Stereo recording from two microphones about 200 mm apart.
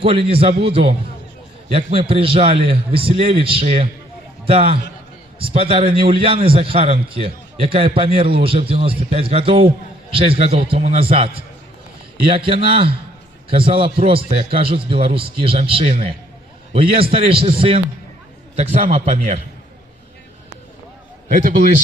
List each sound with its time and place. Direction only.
0.0 s a man's voice: 30° right (ahead or behind)
18.5 s a man's voice: 40° right (ahead or behind)